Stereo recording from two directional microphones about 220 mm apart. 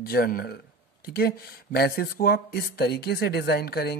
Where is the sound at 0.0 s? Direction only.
40° left (ahead or behind).